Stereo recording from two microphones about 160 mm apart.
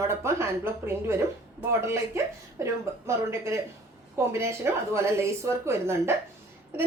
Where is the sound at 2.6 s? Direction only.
15° right (ahead or behind).